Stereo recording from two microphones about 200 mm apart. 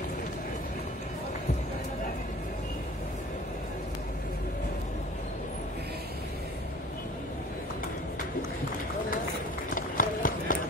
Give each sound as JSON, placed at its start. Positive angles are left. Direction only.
{"t": 9.8, "sound": "clip-clop", "side_deg": 45}